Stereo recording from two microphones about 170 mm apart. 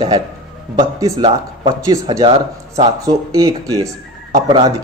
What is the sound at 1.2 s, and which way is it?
Speech, 25° right (ahead or behind).